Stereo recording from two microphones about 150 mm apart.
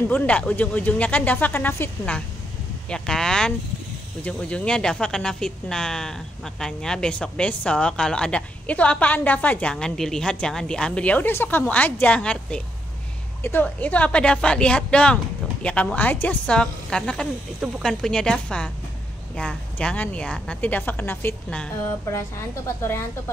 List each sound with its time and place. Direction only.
0.1 s speech: 10° left (ahead or behind)
22.8 s speech: 15° left (ahead or behind)